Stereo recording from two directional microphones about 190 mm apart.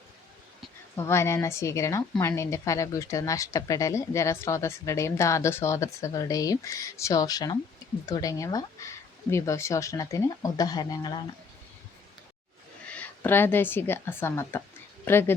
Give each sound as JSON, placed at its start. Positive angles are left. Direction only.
{"t": 0.9, "sound": "a woman's voice", "side_deg": 15}
{"t": 12.9, "sound": "speech", "side_deg": 10}